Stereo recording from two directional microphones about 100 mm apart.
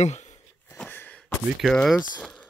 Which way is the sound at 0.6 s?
15° left (ahead or behind).